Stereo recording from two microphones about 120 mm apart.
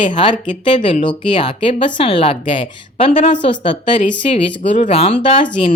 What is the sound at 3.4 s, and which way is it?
Speech, 40° left (ahead or behind).